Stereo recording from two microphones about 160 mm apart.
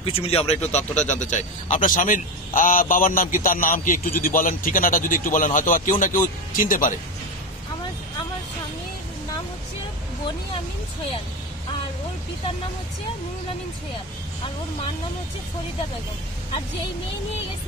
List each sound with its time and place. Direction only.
0.0 s a man's voice: 40° left (ahead or behind); by 7.0 s 55° left (ahead or behind)